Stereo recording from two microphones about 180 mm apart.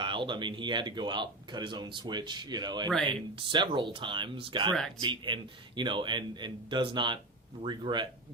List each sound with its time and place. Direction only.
0.0 s speech: 25° right (ahead or behind)